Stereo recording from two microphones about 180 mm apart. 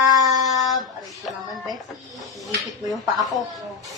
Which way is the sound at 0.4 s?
Centre (ahead or behind).